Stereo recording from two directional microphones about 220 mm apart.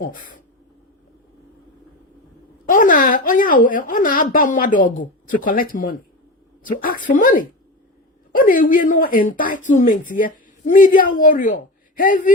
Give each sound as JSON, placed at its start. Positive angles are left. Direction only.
{"t": 0.0, "sound": "speech", "side_deg": 35}
{"t": 2.6, "sound": "a woman's voice", "side_deg": 35}